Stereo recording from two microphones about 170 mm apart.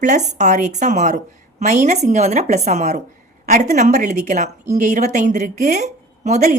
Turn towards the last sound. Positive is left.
turn(degrees=-45)  # may be behind; listen again after turning